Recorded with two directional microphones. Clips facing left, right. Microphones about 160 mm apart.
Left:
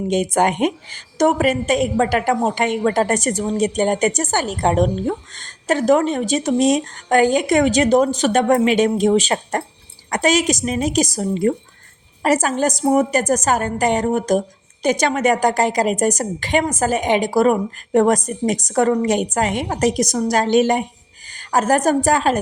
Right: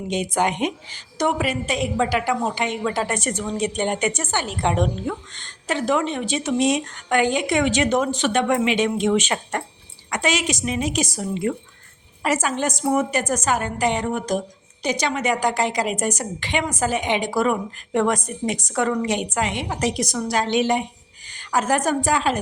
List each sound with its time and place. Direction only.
0.1 s a woman's voice: 50° left (ahead or behind)